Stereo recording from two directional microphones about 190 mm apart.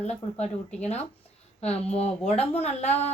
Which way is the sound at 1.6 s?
35° left (ahead or behind).